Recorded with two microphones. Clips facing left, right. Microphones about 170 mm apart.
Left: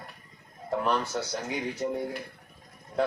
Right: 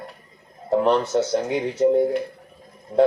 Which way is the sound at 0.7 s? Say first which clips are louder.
Right 9 dB; 25° right (ahead or behind).